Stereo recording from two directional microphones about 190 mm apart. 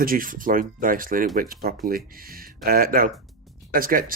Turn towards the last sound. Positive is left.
turn(degrees=-50)  # may be behind; listen again after turning